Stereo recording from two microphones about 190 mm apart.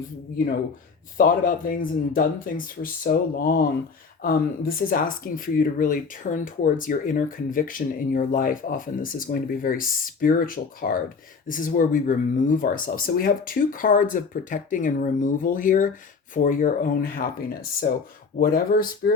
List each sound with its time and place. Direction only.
1.1 s speech: 45° left (ahead or behind)